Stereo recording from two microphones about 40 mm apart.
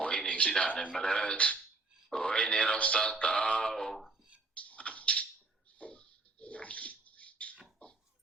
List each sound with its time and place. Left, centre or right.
0.0 s a sound: left
0.6 s music: left
0.9 s music: centre
1.2 s music: left
2.7 s speech: left
3.0 s music: left
3.7 s speech: centre
4.5 s a sound: left
5.8 s bathtub: left
7.8 s a sound: left